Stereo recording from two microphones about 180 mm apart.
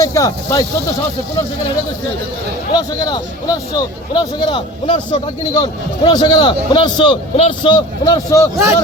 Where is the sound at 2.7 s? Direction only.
25° left (ahead or behind).